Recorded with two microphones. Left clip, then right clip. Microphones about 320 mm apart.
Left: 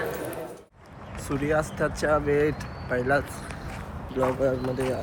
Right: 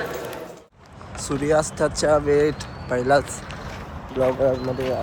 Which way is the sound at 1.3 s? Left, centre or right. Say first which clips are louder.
Right 5 dB; centre.